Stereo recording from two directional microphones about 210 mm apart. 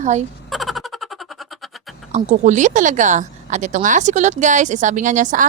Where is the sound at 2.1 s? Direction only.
35° right (ahead or behind).